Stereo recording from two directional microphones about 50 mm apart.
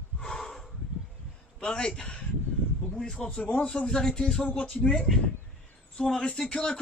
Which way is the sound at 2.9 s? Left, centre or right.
Centre.